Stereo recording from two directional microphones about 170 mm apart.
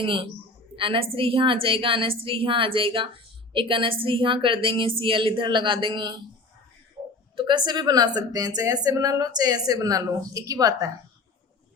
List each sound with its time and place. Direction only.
0.0 s a woman's voice: 30° right (ahead or behind)
7.3 s a woman's voice: 25° right (ahead or behind)